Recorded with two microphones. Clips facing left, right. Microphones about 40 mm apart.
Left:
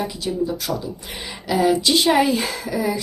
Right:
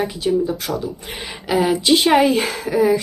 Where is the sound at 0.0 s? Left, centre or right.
Right.